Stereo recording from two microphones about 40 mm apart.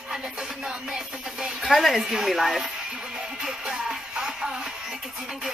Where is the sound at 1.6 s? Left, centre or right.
Centre.